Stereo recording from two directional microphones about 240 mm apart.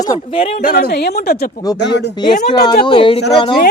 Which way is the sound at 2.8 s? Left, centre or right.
Left.